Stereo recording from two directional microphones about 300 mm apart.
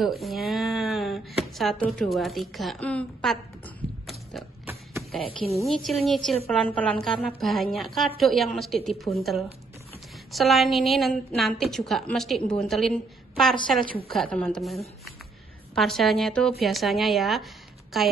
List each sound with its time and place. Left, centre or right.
0.2 s speech: centre
5.4 s a woman's voice: centre
5.7 s a woman's voice: centre